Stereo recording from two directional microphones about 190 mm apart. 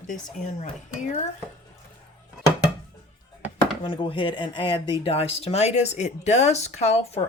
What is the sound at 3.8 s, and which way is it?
Speech, 25° left (ahead or behind).